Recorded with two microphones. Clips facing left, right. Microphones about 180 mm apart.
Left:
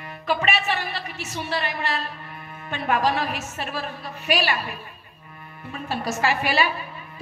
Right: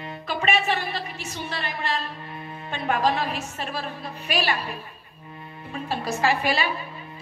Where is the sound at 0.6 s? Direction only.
35° right (ahead or behind).